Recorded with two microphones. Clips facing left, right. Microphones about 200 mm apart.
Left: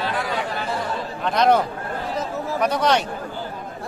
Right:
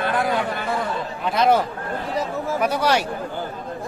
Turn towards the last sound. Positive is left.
turn(degrees=-5)  # may be behind; listen again after turning